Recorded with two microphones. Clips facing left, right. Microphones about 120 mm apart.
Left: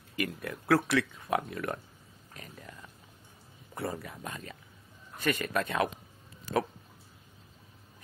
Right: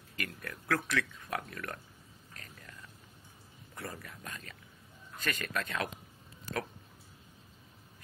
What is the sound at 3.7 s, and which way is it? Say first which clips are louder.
Speech: left 8 dB; 25° left (ahead or behind).